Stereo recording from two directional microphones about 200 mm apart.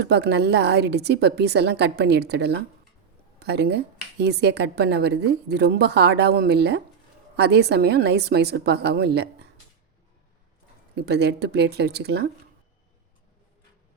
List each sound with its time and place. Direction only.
0.0 s speech: 55° right (ahead or behind)
10.9 s speech: 55° right (ahead or behind)